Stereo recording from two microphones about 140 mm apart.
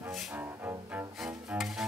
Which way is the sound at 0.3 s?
15° right (ahead or behind).